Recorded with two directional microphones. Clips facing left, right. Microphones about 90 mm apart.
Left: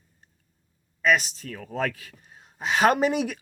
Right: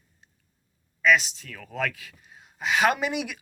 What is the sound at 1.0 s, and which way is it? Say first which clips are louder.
Speech: right 1 dB; 45° left (ahead or behind).